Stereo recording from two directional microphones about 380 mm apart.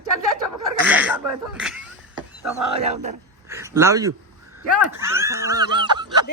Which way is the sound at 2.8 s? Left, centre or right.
Centre.